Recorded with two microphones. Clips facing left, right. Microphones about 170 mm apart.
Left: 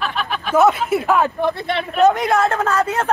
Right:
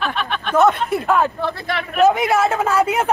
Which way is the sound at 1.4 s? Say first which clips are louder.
Left 3 dB; 25° left (ahead or behind).